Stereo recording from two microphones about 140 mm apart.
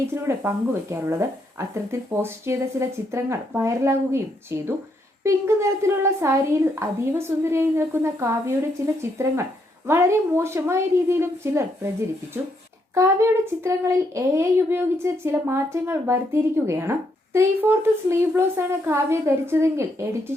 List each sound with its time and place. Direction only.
0.1 s speech: 20° right (ahead or behind)